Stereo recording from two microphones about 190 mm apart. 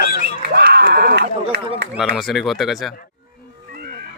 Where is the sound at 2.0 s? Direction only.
Centre (ahead or behind).